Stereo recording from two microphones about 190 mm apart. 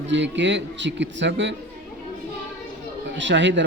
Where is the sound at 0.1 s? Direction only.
70° right (ahead or behind).